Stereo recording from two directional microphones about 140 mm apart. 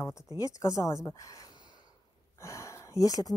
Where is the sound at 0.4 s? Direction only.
25° left (ahead or behind).